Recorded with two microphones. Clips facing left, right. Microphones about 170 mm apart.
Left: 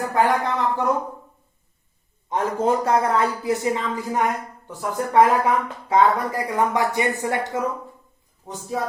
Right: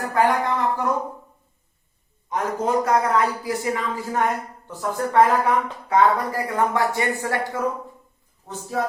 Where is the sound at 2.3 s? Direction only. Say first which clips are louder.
Left 2 dB; 30° left (ahead or behind).